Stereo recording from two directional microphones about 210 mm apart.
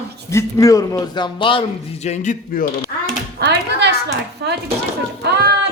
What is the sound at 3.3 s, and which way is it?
Speech, 55° right (ahead or behind).